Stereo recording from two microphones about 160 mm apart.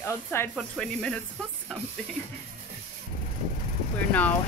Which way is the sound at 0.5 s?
5° left (ahead or behind).